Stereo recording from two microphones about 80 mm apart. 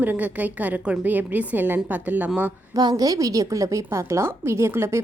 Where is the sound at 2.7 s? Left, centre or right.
Right.